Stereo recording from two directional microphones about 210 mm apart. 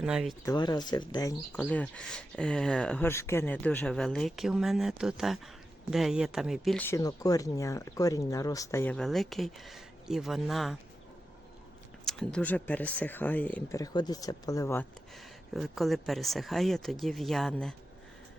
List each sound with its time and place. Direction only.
0.0 s speech: 5° right (ahead or behind)
0.4 s speech: 20° left (ahead or behind)
1.5 s speech: 5° left (ahead or behind)
6.8 s speech: 15° left (ahead or behind); by 10.8 s centre (ahead or behind)
12.0 s speech: 5° left (ahead or behind)
15.1 s speech: centre (ahead or behind)